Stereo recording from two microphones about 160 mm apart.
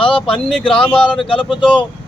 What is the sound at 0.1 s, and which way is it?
Speech, 5° left (ahead or behind).